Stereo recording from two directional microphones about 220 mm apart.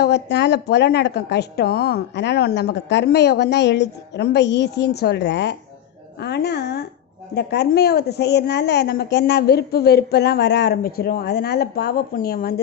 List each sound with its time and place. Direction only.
0.0 s a woman's voice: 50° left (ahead or behind)